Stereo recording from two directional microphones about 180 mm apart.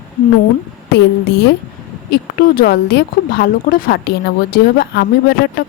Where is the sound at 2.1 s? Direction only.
55° left (ahead or behind).